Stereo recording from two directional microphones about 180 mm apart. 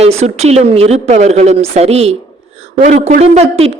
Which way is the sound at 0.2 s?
35° right (ahead or behind).